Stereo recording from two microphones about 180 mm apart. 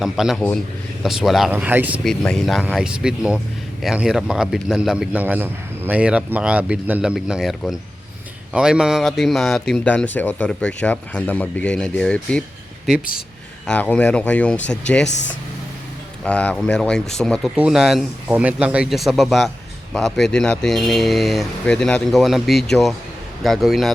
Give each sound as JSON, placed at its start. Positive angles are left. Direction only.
{"t": 0.0, "sound": "a man's voice", "side_deg": 0}
{"t": 2.0, "sound": "a man's voice", "side_deg": 0}
{"t": 13.7, "sound": "a man's voice", "side_deg": 5}
{"t": 15.0, "sound": "speech", "side_deg": 85}
{"t": 16.2, "sound": "a man's voice", "side_deg": 5}